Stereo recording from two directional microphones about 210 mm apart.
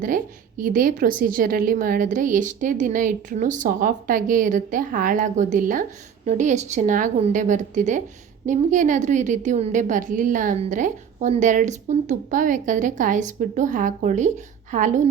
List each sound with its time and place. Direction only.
0.0 s a woman's voice: 40° right (ahead or behind)